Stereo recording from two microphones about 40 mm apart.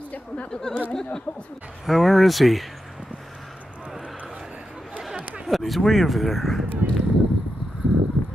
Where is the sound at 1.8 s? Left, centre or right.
Centre.